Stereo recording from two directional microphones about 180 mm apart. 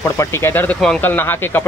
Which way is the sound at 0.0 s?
15° left (ahead or behind).